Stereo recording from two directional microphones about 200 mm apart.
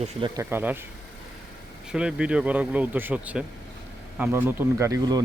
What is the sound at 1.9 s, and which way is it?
Speech, 5° right (ahead or behind).